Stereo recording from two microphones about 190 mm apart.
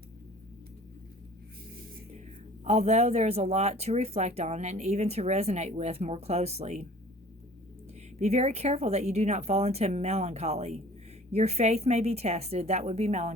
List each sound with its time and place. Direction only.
2.6 s speech: 35° right (ahead or behind)
8.2 s speech: 35° right (ahead or behind)